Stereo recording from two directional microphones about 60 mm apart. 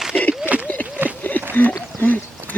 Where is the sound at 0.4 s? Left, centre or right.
Right.